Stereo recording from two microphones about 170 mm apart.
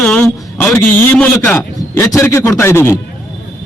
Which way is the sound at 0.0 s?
10° left (ahead or behind).